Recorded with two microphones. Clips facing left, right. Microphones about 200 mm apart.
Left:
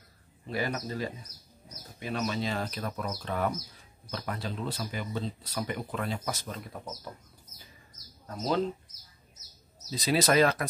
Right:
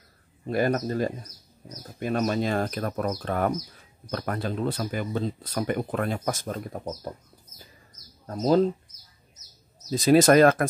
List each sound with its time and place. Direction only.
0.5 s speech: 50° right (ahead or behind)
8.3 s speech: 40° right (ahead or behind)
9.8 s speech: 50° right (ahead or behind)